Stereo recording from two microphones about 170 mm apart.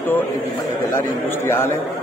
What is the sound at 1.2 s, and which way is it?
Speech, 15° left (ahead or behind).